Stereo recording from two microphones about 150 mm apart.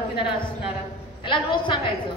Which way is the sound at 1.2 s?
35° left (ahead or behind).